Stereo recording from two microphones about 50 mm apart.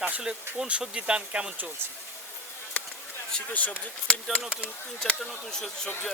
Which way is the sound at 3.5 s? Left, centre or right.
Left.